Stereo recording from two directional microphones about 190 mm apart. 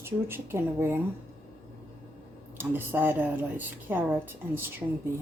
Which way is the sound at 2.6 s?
10° right (ahead or behind).